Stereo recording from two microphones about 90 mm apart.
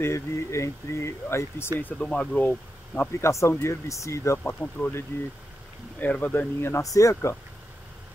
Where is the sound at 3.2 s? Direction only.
35° left (ahead or behind); by 6.4 s 15° left (ahead or behind).